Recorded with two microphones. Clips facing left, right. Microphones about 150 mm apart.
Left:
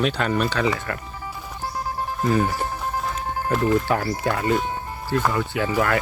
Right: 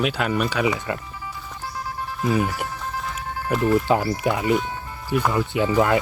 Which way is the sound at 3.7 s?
20° right (ahead or behind).